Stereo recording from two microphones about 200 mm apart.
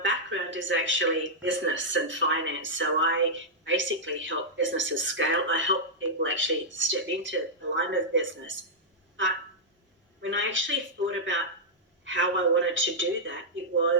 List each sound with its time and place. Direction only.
0.0 s speech: 70° right (ahead or behind)
10.2 s speech: 70° right (ahead or behind)